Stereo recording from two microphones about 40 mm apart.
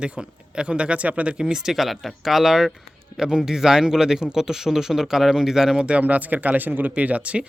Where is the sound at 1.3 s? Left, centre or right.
Centre.